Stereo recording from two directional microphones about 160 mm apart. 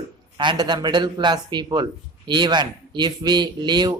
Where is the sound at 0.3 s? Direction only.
25° right (ahead or behind).